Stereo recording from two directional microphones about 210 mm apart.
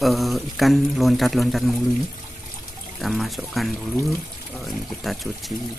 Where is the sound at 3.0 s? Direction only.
Centre (ahead or behind).